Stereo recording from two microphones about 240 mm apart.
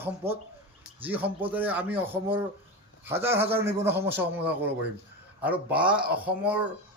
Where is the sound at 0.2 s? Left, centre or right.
Centre.